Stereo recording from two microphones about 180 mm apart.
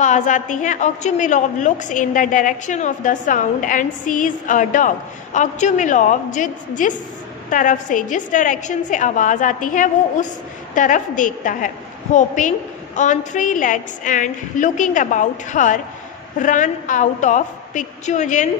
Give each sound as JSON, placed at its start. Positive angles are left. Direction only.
{"t": 0.0, "sound": "a woman's voice", "side_deg": 45}